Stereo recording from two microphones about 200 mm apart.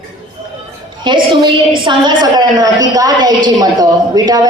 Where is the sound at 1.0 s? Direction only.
25° right (ahead or behind).